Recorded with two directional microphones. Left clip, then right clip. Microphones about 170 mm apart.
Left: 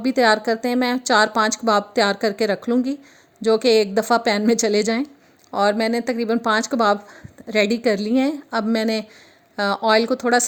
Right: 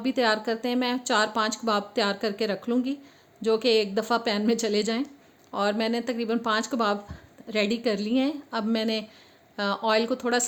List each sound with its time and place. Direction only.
0.0 s speech: 45° left (ahead or behind)